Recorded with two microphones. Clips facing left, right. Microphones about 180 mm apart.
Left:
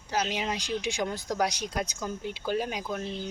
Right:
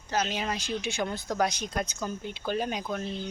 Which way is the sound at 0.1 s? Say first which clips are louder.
Even; 10° left (ahead or behind).